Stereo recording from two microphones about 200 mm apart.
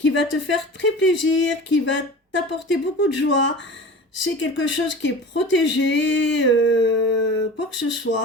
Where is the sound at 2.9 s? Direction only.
65° left (ahead or behind).